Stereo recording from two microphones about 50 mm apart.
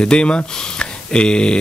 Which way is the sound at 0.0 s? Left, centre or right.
Centre.